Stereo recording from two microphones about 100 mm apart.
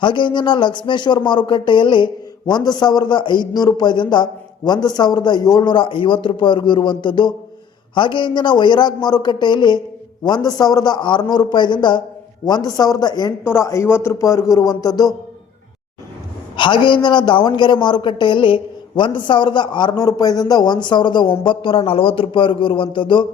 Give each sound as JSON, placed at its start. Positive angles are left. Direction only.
{"t": 0.0, "sound": "a man's voice", "side_deg": 55}
{"t": 2.6, "sound": "a man's voice", "side_deg": 45}
{"t": 13.5, "sound": "a man's voice", "side_deg": 30}
{"t": 16.6, "sound": "a man's voice", "side_deg": 55}